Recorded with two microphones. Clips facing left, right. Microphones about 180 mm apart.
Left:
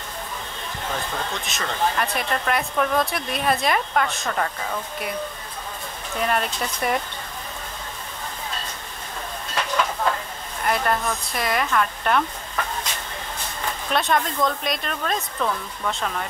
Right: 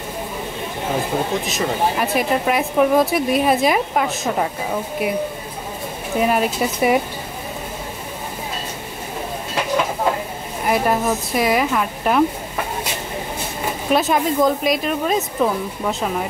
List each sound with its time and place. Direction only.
0.8 s speech: 15° right (ahead or behind)
6.1 s speech: 5° right (ahead or behind)
9.6 s a sound: 20° right (ahead or behind)
10.6 s speech: 10° right (ahead or behind)
15.3 s speech: 20° right (ahead or behind)